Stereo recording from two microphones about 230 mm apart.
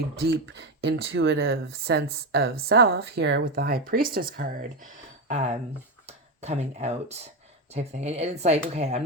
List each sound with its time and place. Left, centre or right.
0.2 s speech: right
6.1 s speech: right